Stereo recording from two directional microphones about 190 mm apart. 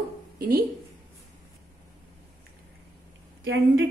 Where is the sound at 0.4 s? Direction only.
55° right (ahead or behind).